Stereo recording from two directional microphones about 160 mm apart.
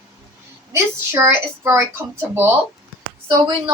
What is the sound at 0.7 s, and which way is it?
A woman's voice, 15° right (ahead or behind).